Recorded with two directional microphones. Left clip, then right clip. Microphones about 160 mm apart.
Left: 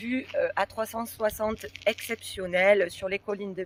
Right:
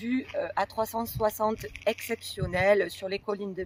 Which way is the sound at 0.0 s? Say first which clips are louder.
Even; 20° left (ahead or behind).